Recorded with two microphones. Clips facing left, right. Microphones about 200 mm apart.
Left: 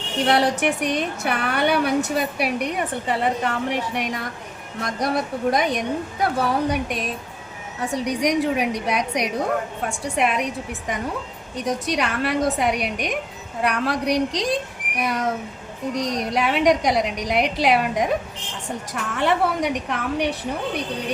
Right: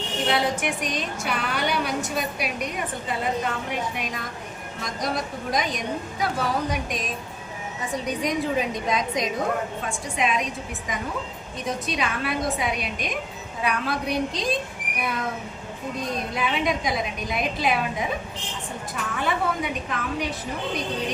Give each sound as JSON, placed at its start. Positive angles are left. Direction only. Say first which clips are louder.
{"t": 0.3, "sound": "a woman's voice", "louder": "left 5 dB", "side_deg": 70}
{"t": 7.8, "sound": "a woman's voice", "louder": "left 5 dB", "side_deg": 70}
{"t": 11.5, "sound": "a woman's voice", "louder": "left 5 dB", "side_deg": 70}
{"t": 19.1, "sound": "a woman's voice", "louder": "left 5 dB", "side_deg": 75}